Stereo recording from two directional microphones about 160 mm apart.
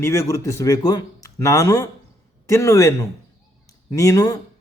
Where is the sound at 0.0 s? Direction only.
15° left (ahead or behind).